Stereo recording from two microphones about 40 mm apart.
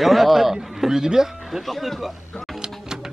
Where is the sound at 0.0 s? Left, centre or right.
Centre.